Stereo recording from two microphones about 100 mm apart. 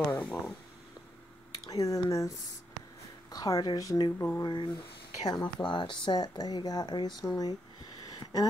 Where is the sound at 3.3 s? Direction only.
40° left (ahead or behind).